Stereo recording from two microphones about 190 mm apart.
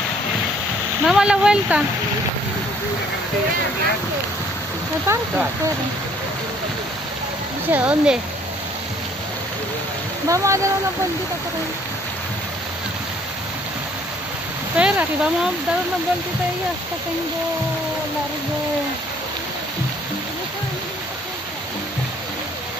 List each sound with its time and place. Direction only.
1.0 s speech: 5° right (ahead or behind)
5.0 s speech: 15° right (ahead or behind)
7.7 s speech: 5° right (ahead or behind)
10.2 s speech: 15° right (ahead or behind)
14.8 s speech: 5° right (ahead or behind)